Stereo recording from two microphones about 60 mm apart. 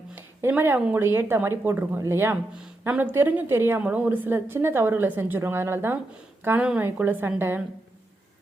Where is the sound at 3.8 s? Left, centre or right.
Right.